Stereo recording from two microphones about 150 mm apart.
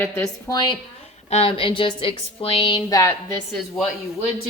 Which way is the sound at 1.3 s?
40° left (ahead or behind).